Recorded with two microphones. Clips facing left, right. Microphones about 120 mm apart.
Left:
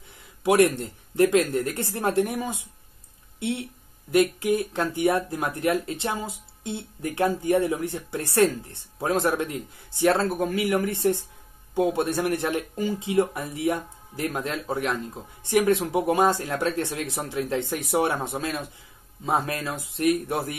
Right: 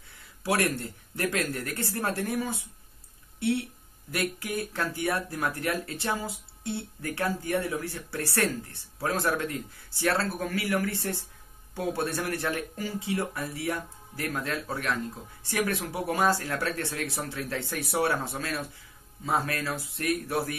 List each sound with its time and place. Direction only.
0.4 s speech: 20° left (ahead or behind)